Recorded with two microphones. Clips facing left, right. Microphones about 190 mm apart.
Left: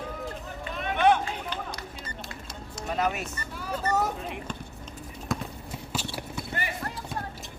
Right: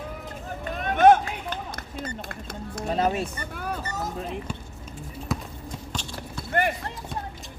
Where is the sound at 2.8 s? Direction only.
30° right (ahead or behind).